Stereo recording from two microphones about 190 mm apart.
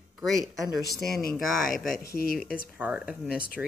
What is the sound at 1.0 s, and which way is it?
Speech, centre (ahead or behind).